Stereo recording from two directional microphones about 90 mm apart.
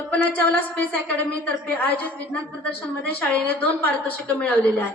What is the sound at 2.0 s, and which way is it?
A woman's voice, 15° left (ahead or behind).